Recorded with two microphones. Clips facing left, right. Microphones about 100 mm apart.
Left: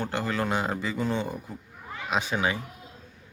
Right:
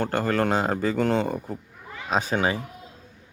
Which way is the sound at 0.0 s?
50° right (ahead or behind).